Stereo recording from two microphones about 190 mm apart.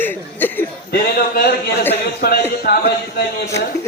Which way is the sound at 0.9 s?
55° left (ahead or behind).